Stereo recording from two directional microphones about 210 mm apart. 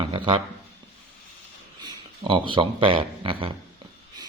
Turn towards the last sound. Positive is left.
turn(degrees=-25)  # may be behind; listen again after turning